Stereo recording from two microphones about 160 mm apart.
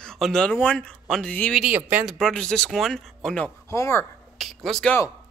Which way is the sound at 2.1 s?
5° left (ahead or behind).